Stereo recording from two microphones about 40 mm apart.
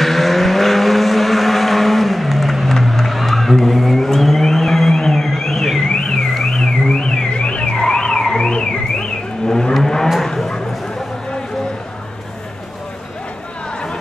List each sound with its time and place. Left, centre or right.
0.0 s vehicle: centre
5.9 s car alarm: centre
6.3 s a sound: centre
7.7 s car alarm: centre
9.5 s vehicle: centre
10.2 s bow-wow: centre